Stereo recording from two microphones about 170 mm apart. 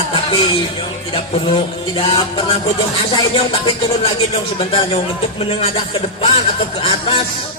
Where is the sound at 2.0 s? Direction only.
35° left (ahead or behind).